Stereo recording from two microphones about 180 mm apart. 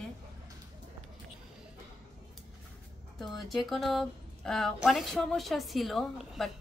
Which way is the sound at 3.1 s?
Centre (ahead or behind).